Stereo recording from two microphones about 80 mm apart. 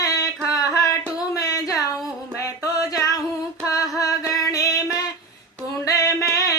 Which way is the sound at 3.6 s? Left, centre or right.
Left.